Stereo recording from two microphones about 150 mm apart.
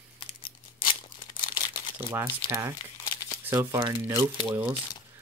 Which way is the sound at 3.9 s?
15° right (ahead or behind).